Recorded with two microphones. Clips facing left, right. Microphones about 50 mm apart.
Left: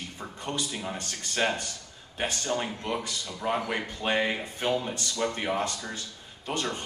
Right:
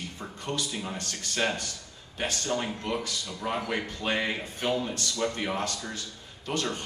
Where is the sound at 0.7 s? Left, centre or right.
Centre.